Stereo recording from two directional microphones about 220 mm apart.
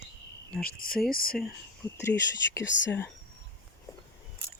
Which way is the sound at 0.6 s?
40° left (ahead or behind).